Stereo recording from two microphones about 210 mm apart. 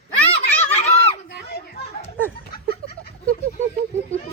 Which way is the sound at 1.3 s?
50° left (ahead or behind).